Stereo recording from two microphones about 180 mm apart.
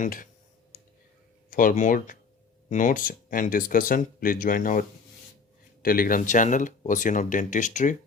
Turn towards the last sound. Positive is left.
turn(degrees=45)  # may be behind; listen again after turning